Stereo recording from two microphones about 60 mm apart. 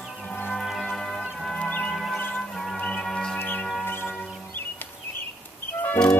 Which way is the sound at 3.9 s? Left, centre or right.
Left.